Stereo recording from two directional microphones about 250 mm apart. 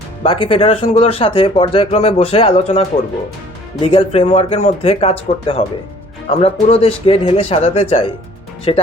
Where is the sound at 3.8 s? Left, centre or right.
Left.